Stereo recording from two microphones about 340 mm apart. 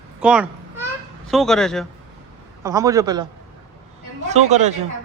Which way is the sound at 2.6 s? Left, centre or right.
Centre.